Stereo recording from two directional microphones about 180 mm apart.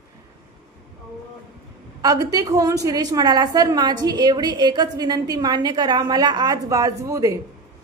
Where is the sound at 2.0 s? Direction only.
20° right (ahead or behind).